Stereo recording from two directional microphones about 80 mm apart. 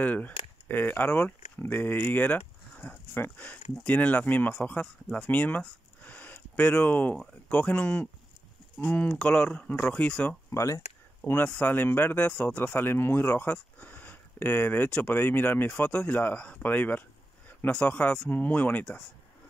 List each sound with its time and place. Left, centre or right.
0.0 s speech: centre
2.1 s a sound: left
3.2 s speech: centre
6.0 s a sound: left
7.2 s speech: centre
10.5 s speech: left
11.2 s speech: left